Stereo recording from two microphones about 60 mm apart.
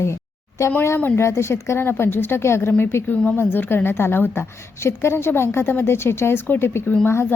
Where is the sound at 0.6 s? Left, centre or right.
Left.